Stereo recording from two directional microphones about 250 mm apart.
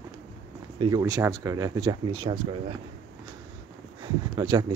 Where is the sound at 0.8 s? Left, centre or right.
Centre.